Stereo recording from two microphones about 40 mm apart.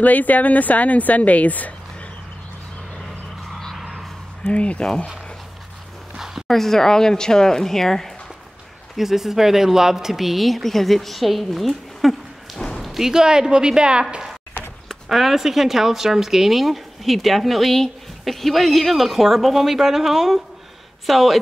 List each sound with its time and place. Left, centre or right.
0.0 s a woman's voice: left
3.0 s vehicle: centre
4.5 s a woman's voice: left
4.8 s speech: centre
6.1 s a sound: centre
6.4 s speech: centre
8.9 s speech: centre
12.5 s a sound: centre
13.0 s a woman's voice: centre
14.9 s speech: centre